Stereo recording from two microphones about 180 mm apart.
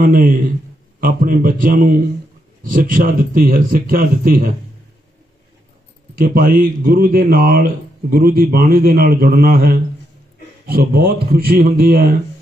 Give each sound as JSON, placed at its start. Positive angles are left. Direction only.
{"t": 0.0, "sound": "a man's voice", "side_deg": -50}
{"t": 6.1, "sound": "speech", "side_deg": -50}